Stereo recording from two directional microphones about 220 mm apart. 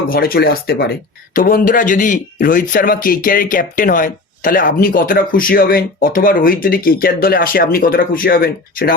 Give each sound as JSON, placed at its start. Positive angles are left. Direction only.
{"t": 0.1, "sound": "speech", "side_deg": 40}